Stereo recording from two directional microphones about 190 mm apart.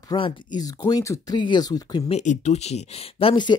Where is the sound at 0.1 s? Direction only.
20° left (ahead or behind).